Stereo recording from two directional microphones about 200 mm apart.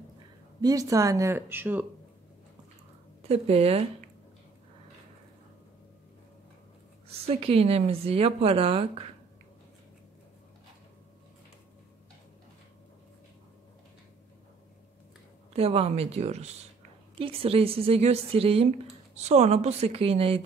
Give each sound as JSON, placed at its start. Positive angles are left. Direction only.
{"t": 0.6, "sound": "speech", "side_deg": -15}
{"t": 3.3, "sound": "a woman's voice", "side_deg": -30}
{"t": 7.1, "sound": "speech", "side_deg": -30}
{"t": 15.5, "sound": "a woman's voice", "side_deg": -30}